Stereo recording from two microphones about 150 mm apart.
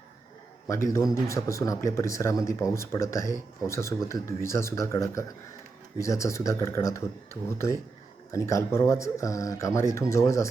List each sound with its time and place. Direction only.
0.7 s speech: 20° left (ahead or behind)
8.3 s speech: 20° left (ahead or behind)